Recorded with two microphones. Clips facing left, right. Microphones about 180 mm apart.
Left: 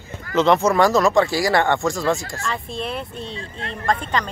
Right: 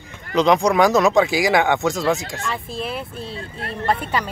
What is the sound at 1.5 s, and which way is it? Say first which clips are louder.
Speech: even; centre (ahead or behind).